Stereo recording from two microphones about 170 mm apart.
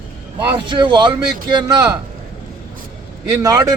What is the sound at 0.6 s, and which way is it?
A man's voice, 25° right (ahead or behind).